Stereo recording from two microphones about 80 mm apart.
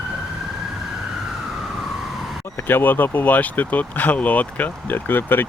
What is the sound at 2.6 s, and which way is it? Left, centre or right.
Speech, left.